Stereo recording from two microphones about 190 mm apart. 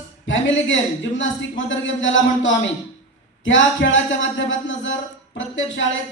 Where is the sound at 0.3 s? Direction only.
80° left.